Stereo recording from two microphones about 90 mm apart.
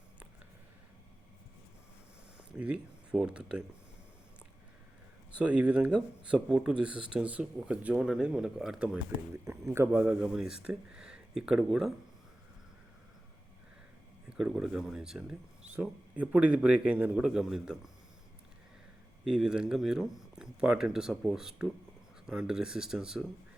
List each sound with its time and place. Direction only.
2.4 s speech: 15° right (ahead or behind)
5.4 s speech: 15° right (ahead or behind)
9.4 s speech: 30° right (ahead or behind)
9.9 s speech: 15° right (ahead or behind)
14.3 s speech: 10° right (ahead or behind)
19.2 s speech: 5° right (ahead or behind)